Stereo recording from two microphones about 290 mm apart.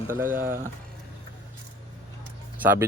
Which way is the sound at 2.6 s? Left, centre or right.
Centre.